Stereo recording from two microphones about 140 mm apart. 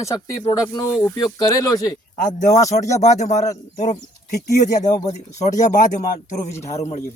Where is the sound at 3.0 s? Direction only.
55° left (ahead or behind).